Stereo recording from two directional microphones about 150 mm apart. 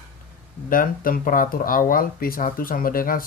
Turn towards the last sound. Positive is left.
turn(degrees=70)  # may be behind; listen again after turning